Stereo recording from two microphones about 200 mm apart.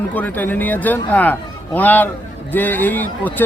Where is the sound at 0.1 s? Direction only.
10° left (ahead or behind).